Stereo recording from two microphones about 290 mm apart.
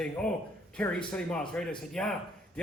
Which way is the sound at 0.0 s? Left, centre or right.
Centre.